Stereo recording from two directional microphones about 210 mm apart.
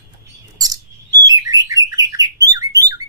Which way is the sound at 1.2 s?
15° right (ahead or behind).